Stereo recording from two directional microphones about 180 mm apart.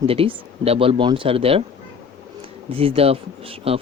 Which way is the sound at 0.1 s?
30° right (ahead or behind).